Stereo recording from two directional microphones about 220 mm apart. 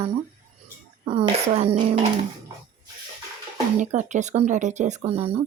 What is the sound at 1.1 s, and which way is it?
Speech, 25° right (ahead or behind).